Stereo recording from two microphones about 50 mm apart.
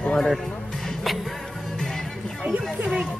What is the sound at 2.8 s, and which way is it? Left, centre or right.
Music, right.